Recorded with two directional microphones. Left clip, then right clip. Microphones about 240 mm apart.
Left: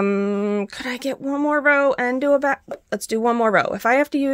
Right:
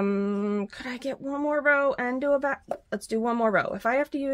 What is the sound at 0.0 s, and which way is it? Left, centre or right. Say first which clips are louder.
Speech: left 7 dB; left.